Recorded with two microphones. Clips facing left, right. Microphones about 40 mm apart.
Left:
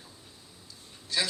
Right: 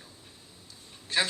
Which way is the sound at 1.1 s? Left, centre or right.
Right.